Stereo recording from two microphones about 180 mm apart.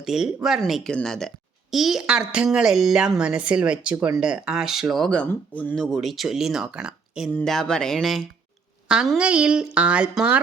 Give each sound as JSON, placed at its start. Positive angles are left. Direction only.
{"t": 0.0, "sound": "speech", "side_deg": 0}